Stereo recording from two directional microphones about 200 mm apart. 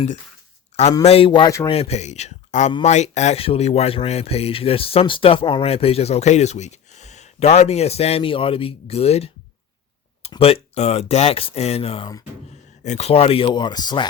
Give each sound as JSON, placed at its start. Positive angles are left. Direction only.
{"t": 1.0, "sound": "speech", "side_deg": 30}
{"t": 1.7, "sound": "speech", "side_deg": 30}
{"t": 12.8, "sound": "speech", "side_deg": 35}